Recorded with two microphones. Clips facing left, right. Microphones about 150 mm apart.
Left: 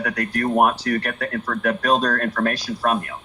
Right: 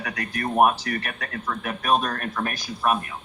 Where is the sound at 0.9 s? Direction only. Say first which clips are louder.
Left 7 dB; 70° left (ahead or behind).